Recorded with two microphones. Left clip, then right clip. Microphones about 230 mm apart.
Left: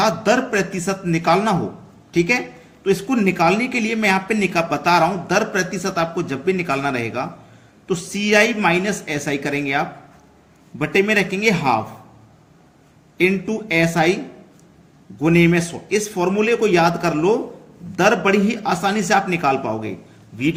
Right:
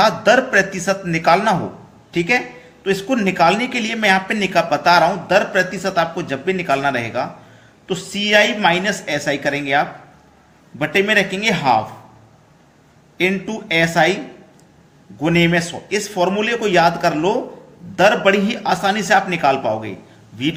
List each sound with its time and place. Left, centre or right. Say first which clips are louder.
0.0 s a man's voice: right 4 dB; centre
13.1 s speech: left 1 dB; centre
15.2 s speech: even; centre